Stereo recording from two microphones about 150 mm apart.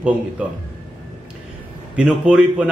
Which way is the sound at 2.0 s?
10° right (ahead or behind).